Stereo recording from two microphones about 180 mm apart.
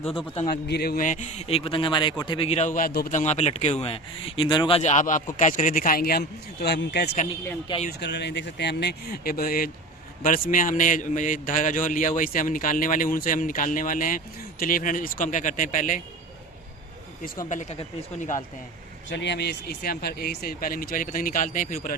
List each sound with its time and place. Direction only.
0.4 s a man's voice: 60° left (ahead or behind); by 4.8 s 25° left (ahead or behind)
4.8 s a man's voice: 40° left (ahead or behind)
17.5 s a man's voice: 40° left (ahead or behind)
19.1 s speech: 70° left (ahead or behind); by 21.9 s 50° left (ahead or behind)